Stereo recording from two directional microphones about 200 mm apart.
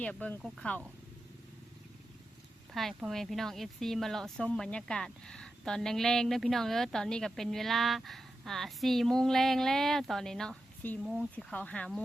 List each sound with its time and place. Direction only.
0.0 s speech: 5° left (ahead or behind)
2.7 s speech: centre (ahead or behind)